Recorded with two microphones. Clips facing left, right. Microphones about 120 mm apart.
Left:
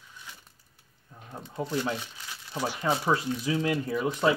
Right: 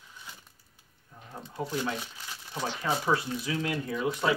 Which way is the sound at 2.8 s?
30° left (ahead or behind).